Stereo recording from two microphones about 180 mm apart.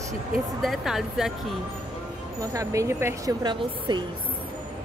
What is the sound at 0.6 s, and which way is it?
Speech, centre (ahead or behind).